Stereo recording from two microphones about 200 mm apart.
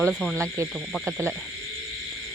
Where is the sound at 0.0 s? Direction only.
Centre (ahead or behind).